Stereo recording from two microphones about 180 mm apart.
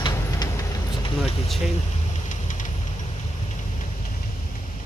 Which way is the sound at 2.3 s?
45° left (ahead or behind).